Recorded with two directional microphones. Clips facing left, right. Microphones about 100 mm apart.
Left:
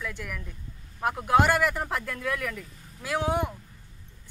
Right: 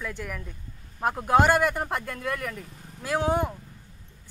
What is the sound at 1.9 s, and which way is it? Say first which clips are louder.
Speech: even; 40° right (ahead or behind).